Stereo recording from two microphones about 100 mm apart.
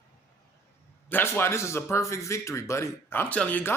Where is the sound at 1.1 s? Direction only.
20° left (ahead or behind).